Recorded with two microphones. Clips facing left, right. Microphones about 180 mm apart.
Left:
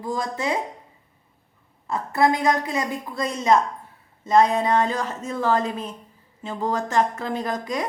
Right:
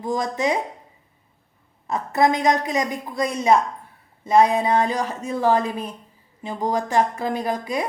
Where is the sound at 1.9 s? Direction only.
20° right (ahead or behind).